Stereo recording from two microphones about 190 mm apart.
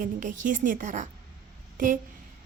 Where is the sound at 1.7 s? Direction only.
45° right (ahead or behind).